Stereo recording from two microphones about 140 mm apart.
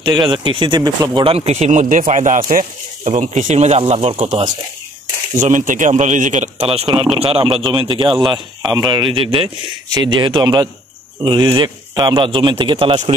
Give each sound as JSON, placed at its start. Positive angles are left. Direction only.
{"t": 0.0, "sound": "a man's voice", "side_deg": -35}
{"t": 5.4, "sound": "a man's voice", "side_deg": -65}